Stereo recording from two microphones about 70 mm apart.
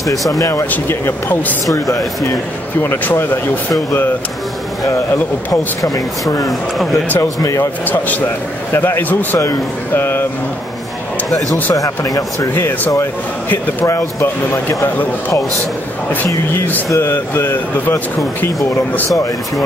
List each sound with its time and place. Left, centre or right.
0.7 s speech: left
2.8 s speech: left
4.8 s a man's voice: left
7.2 s a man's voice: left
7.8 s a man's voice: left
9.9 s a sound: left
11.7 s a man's voice: left
13.8 s speech: left
16.5 s a man's voice: left